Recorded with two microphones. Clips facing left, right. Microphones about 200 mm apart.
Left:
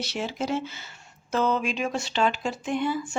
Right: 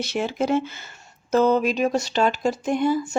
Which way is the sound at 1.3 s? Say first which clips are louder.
Right 7 dB; 40° right (ahead or behind).